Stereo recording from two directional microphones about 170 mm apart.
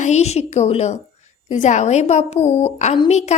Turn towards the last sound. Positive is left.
turn(degrees=35)  # may be behind; listen again after turning